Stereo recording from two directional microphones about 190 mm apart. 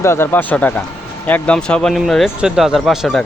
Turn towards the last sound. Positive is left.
turn(degrees=0)  # may be behind; listen again after turning